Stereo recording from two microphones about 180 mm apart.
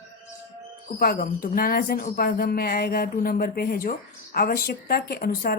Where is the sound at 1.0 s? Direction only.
55° left (ahead or behind).